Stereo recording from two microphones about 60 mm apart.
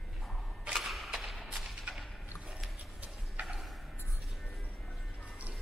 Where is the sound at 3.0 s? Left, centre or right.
Right.